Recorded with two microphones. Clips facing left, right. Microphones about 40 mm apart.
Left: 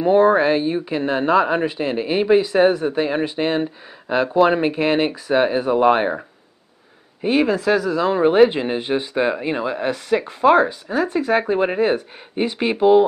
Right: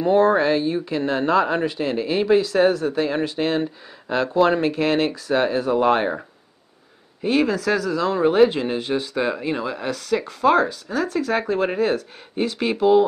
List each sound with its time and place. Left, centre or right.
0.0 s speech: centre